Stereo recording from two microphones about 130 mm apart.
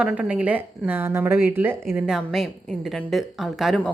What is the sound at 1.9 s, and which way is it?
Speech, 5° right (ahead or behind).